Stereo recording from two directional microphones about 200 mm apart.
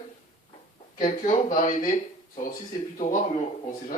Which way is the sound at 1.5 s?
40° left (ahead or behind).